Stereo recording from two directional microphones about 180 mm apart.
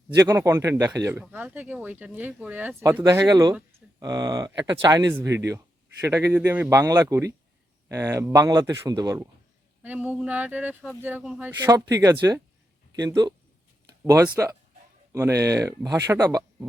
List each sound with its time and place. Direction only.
0.2 s speech: 15° right (ahead or behind)
9.8 s speech: 10° right (ahead or behind)